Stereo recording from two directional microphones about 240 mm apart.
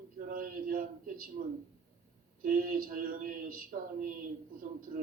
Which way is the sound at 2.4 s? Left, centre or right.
Right.